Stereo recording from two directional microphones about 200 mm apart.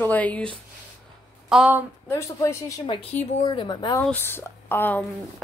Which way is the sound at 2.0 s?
15° left (ahead or behind).